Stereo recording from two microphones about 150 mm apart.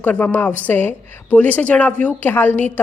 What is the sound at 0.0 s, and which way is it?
A woman's voice, 10° left (ahead or behind).